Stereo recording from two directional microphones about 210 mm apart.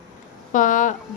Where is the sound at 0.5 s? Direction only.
40° left (ahead or behind).